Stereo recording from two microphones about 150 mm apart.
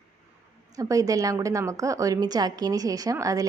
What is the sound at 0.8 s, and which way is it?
A woman's voice, 25° right (ahead or behind).